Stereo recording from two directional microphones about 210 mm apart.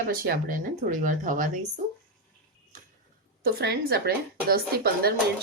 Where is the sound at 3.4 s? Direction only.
50° right (ahead or behind).